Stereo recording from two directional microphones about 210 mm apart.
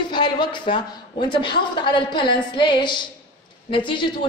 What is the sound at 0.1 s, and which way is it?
A woman's voice, 20° left (ahead or behind).